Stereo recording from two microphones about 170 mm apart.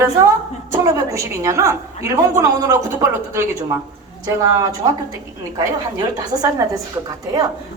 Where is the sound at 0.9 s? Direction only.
20° right (ahead or behind).